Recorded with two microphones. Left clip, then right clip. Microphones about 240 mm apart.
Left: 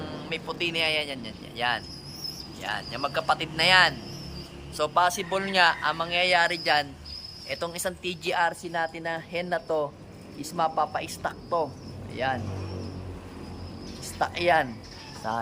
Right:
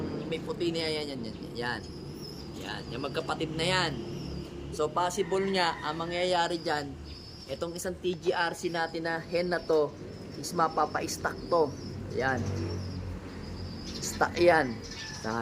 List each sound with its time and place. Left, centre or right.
0.3 s a man's voice: centre
8.0 s a woman's voice: left
8.3 s a man's voice: centre
14.2 s a man's voice: centre